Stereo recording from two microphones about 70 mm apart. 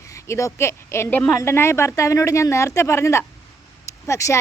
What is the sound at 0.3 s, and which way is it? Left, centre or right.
A woman's voice, left.